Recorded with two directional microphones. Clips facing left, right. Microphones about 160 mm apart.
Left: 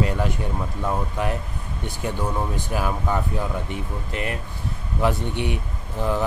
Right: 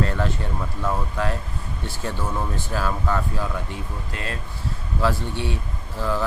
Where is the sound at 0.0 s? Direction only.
15° left (ahead or behind).